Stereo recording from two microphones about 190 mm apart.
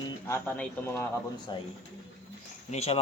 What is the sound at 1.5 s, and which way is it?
Speech, 25° left (ahead or behind).